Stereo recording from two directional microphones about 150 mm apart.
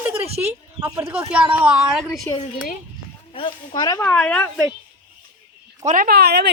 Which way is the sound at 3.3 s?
35° left (ahead or behind).